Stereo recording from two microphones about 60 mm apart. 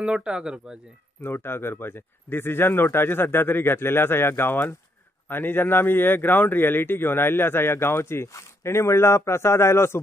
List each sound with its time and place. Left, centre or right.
0.0 s speech: centre
1.2 s speech: left